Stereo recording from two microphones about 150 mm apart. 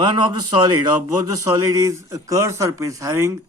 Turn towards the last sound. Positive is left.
turn(degrees=-20)  # may be behind; listen again after turning